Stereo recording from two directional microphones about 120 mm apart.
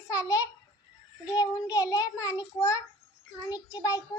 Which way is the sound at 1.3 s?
35° left (ahead or behind).